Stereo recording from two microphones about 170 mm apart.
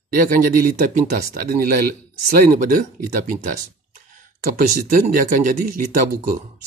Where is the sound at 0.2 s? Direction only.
55° right (ahead or behind).